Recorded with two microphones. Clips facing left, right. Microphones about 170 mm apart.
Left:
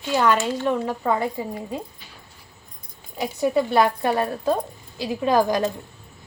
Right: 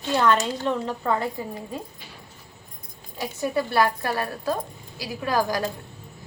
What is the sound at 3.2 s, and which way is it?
A woman's voice, 20° left (ahead or behind).